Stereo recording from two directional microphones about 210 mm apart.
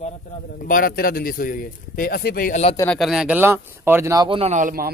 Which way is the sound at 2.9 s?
Centre (ahead or behind).